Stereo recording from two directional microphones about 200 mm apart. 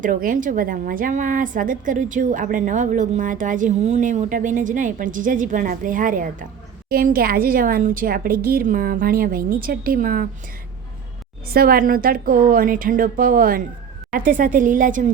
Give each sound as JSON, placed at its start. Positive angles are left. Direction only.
{"t": 0.0, "sound": "a woman's voice", "side_deg": -45}
{"t": 11.5, "sound": "a woman's voice", "side_deg": -50}